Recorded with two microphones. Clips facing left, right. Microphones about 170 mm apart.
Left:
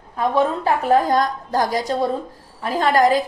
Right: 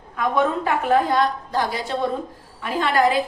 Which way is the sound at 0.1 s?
30° left (ahead or behind).